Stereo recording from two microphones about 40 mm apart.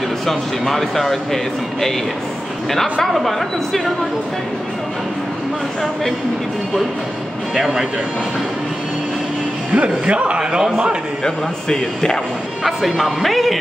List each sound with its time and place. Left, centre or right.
0.3 s speech: centre
7.5 s speech: centre
9.7 s a man's voice: right
11.2 s speech: centre
12.6 s speech: centre